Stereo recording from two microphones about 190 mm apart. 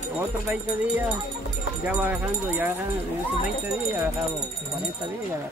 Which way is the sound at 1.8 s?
10° right (ahead or behind).